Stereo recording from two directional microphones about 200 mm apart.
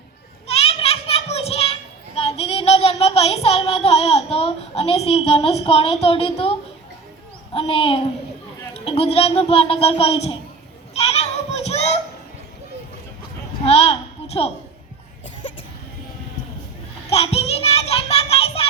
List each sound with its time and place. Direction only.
0.4 s children playing: 30° left (ahead or behind)
7.5 s a child's voice: 30° left (ahead or behind)
10.9 s children playing: 30° left (ahead or behind)
13.7 s a sound: 30° left (ahead or behind)
17.1 s music: 30° left (ahead or behind)